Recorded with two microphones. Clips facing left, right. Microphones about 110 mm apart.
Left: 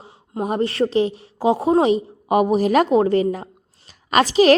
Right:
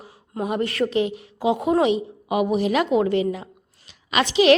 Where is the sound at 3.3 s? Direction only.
40° left (ahead or behind).